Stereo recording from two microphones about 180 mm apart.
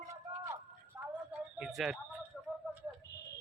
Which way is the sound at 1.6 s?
Centre (ahead or behind).